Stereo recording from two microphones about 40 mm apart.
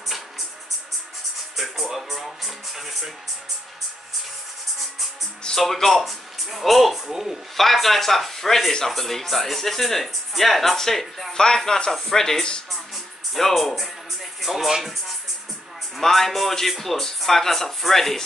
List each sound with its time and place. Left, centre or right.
1.6 s speech: centre
5.6 s a man's voice: centre
7.5 s speech: centre
12.9 s music: centre
14.4 s speech: centre
16.0 s speech: centre